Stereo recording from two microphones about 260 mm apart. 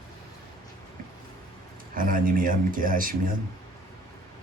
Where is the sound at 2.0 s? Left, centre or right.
Right.